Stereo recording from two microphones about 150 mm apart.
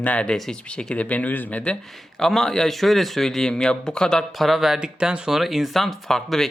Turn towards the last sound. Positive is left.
turn(degrees=5)  # may be behind; listen again after turning